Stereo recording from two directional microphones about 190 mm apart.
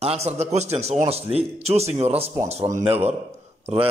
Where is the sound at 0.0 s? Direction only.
35° right (ahead or behind).